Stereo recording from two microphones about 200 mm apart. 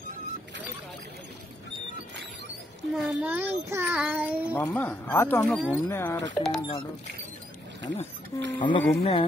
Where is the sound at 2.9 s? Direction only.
10° right (ahead or behind).